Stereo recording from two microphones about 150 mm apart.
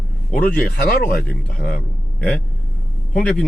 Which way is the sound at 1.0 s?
70° left (ahead or behind).